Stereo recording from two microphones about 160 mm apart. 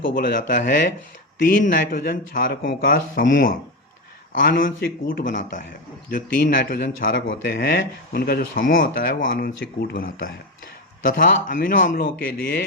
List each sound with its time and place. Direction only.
0.0 s speech: 65° left (ahead or behind)
6.1 s speech: 65° left (ahead or behind)